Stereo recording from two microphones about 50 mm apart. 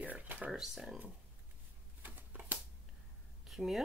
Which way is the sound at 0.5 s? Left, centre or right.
Centre.